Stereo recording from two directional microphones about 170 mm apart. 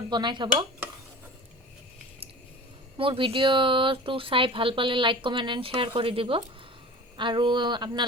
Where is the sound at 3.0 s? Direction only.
30° right (ahead or behind).